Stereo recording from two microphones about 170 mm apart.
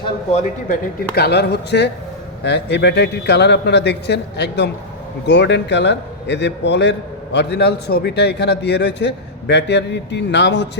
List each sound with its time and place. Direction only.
0.3 s a man's voice: 40° left (ahead or behind)
1.1 s a man's voice: 70° left (ahead or behind); by 6.9 s 90° left
7.3 s a man's voice: 80° left